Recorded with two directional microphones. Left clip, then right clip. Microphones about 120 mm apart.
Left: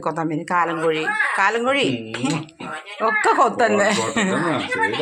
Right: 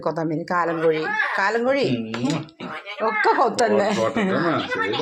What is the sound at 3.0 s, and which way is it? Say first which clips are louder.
Speech: left 2 dB; 35° left (ahead or behind).